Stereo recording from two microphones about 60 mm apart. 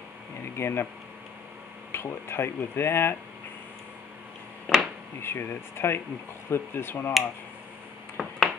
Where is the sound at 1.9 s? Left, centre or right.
Left.